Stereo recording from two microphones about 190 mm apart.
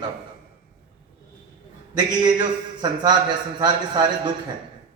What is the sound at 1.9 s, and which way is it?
A man's voice, 25° right (ahead or behind).